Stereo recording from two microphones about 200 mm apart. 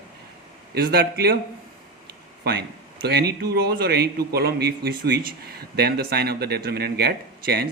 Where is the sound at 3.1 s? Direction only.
55° right (ahead or behind).